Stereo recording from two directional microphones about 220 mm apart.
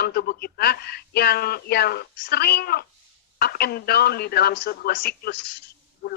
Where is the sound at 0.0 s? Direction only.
45° left (ahead or behind).